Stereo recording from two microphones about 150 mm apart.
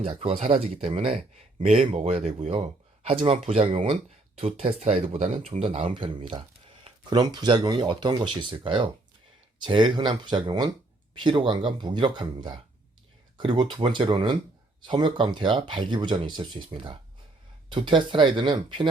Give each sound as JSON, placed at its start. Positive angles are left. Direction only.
{"t": 0.0, "sound": "speech", "side_deg": -40}